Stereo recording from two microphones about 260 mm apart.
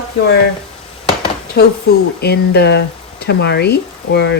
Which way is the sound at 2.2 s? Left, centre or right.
Left.